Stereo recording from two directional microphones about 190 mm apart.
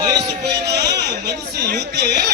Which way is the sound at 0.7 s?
60° right (ahead or behind).